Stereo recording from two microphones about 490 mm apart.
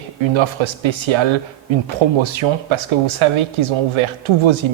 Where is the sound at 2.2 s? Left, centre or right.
Right.